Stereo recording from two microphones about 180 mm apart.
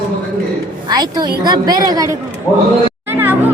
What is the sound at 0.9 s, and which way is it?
A woman's voice, 25° right (ahead or behind).